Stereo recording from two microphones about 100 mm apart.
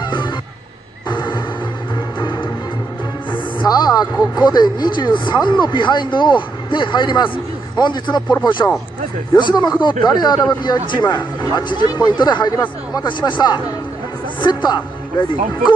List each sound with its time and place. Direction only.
0.0 s wild animals: 50° left (ahead or behind)
1.0 s music: 50° left (ahead or behind)
3.6 s a woman's voice: 40° left (ahead or behind)